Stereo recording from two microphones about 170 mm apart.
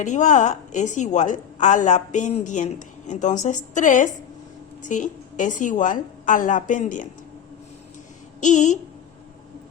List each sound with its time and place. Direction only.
0.0 s a woman's voice: 45° left (ahead or behind)
8.4 s a woman's voice: 45° left (ahead or behind)